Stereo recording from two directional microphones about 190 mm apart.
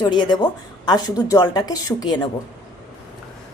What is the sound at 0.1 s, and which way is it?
Speech, 25° left (ahead or behind).